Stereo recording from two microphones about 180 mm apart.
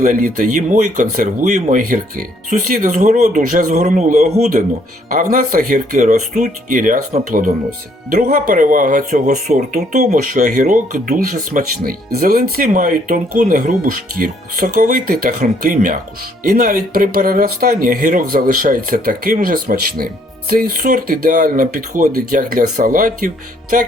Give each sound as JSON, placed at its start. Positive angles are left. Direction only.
{"t": 0.0, "sound": "speech", "side_deg": -50}